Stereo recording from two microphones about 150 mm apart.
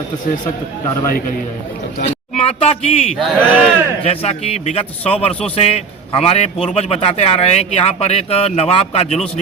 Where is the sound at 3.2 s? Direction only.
Centre (ahead or behind).